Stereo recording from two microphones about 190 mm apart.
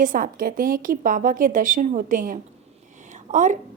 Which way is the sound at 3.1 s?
40° right (ahead or behind).